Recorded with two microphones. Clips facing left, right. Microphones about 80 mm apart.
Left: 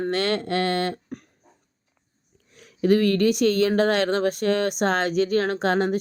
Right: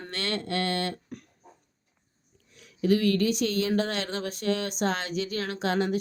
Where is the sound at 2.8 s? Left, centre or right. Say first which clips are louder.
Left 5 dB; left.